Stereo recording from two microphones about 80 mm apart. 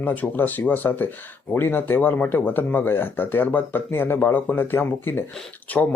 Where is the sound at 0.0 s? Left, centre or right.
Left.